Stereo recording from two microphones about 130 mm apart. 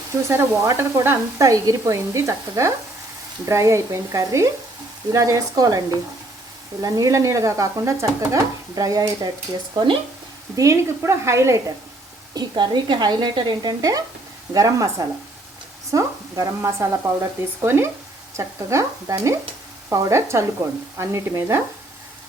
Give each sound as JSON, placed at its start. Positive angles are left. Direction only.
{"t": 0.3, "sound": "speech", "side_deg": -20}
{"t": 9.7, "sound": "speech", "side_deg": -40}
{"t": 10.5, "sound": "speech", "side_deg": -25}
{"t": 12.3, "sound": "speech", "side_deg": -35}